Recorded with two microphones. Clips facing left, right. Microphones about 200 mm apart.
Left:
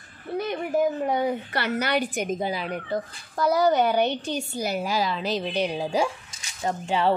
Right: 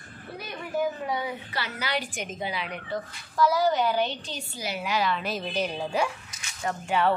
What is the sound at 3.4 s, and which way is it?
A woman's voice, 55° left (ahead or behind).